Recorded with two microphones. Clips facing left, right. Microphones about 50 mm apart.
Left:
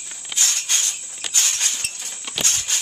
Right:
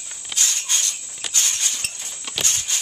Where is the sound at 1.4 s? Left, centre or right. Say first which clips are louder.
Left 1 dB; left.